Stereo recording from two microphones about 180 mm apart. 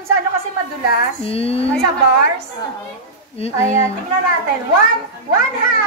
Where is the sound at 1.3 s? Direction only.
35° left (ahead or behind).